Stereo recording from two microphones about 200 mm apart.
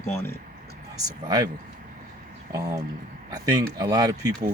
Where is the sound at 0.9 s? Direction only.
20° right (ahead or behind).